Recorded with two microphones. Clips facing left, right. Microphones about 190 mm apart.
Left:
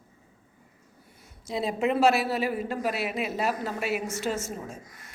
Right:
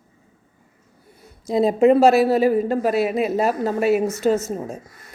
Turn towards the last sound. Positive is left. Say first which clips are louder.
# right 11 dB
turn(degrees=-40)  # may be behind; listen again after turning